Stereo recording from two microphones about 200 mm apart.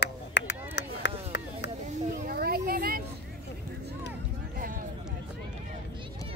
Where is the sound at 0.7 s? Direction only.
60° left (ahead or behind).